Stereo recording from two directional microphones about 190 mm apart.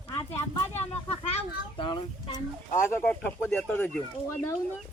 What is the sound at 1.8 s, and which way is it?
Speech, 25° left (ahead or behind).